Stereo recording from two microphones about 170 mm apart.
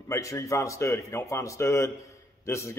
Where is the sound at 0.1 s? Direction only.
20° left (ahead or behind).